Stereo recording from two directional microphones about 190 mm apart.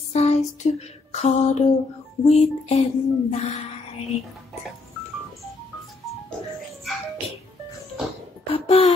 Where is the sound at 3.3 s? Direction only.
35° left (ahead or behind).